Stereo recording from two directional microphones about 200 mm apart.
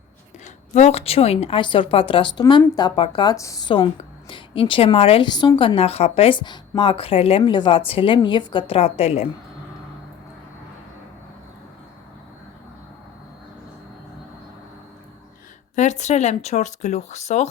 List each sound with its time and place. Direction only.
0.4 s a woman's voice: 35° left (ahead or behind)
15.7 s speech: 35° left (ahead or behind)